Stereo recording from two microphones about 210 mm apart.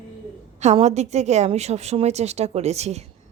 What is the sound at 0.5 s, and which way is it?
A woman's voice, 30° right (ahead or behind).